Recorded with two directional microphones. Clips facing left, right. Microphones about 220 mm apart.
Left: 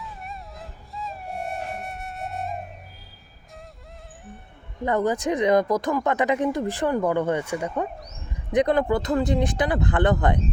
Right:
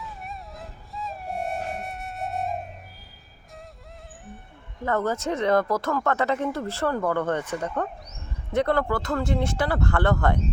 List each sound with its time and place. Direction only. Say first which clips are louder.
0.0 s music: even; centre (ahead or behind)
4.9 s speech: left 3 dB; 15° left (ahead or behind)